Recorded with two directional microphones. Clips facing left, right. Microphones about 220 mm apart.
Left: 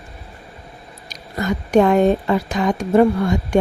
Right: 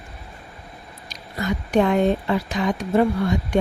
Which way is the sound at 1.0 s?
45° left (ahead or behind).